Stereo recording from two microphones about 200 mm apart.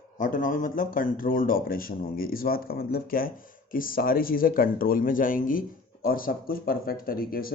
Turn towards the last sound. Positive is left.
turn(degrees=45)  # may be behind; listen again after turning